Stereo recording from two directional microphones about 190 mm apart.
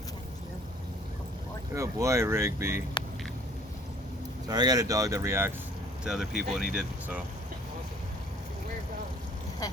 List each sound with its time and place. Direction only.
1.7 s speech: 15° right (ahead or behind)
4.4 s speech: 20° right (ahead or behind)
6.1 s speech: centre (ahead or behind)